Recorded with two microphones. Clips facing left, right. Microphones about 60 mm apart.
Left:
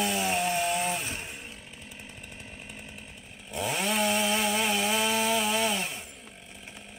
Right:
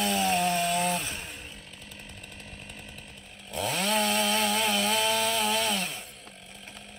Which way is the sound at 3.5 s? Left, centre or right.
Centre.